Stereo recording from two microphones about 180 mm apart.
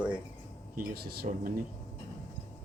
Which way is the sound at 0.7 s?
55° right (ahead or behind).